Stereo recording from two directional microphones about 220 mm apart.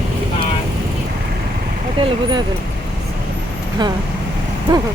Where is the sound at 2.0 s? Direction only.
20° right (ahead or behind).